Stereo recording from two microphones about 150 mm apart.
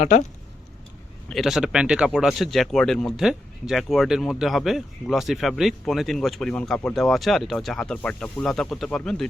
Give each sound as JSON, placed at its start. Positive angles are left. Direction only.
{"t": 0.0, "sound": "speech", "side_deg": 50}
{"t": 1.3, "sound": "speech", "side_deg": 0}